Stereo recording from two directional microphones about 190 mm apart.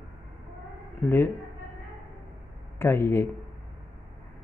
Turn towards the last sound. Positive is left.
turn(degrees=10)  # may be behind; listen again after turning